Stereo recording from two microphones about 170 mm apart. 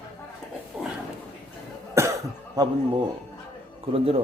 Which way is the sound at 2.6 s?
25° right (ahead or behind).